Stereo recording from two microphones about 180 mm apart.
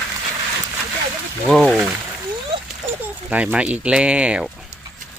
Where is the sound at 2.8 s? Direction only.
15° right (ahead or behind).